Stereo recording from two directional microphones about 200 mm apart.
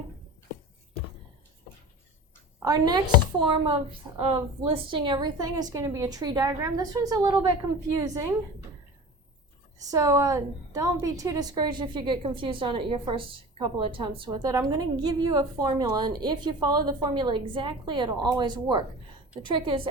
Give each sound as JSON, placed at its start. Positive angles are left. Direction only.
{"t": 2.6, "sound": "a woman's voice", "side_deg": -20}
{"t": 9.8, "sound": "a woman's voice", "side_deg": -15}